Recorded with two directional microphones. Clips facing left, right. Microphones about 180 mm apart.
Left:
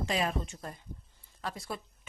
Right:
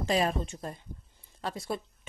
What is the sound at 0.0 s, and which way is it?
Speech, 35° right (ahead or behind).